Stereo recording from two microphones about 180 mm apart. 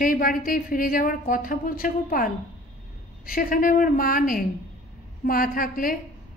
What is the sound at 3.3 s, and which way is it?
A woman's voice, 50° left (ahead or behind).